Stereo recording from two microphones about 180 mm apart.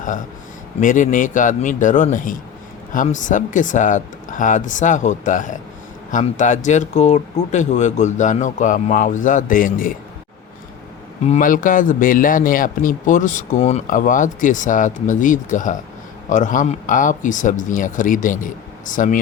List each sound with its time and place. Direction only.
0.8 s a man's voice: 45° left (ahead or behind)
11.3 s a man's voice: 50° left (ahead or behind)